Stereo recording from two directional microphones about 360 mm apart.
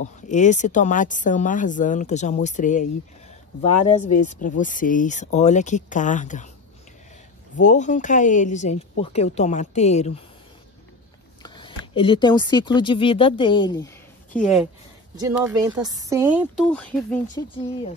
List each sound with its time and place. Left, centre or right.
0.0 s speech: centre
3.8 s speech: centre
7.5 s speech: left
11.4 s speech: centre